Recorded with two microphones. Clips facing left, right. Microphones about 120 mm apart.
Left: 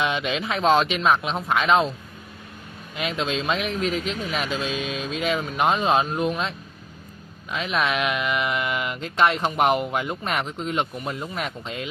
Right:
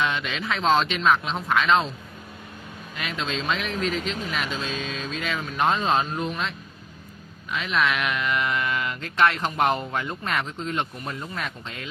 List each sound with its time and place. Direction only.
0.0 s speech: 20° left (ahead or behind)
3.0 s speech: 20° left (ahead or behind)
7.5 s speech: 20° left (ahead or behind)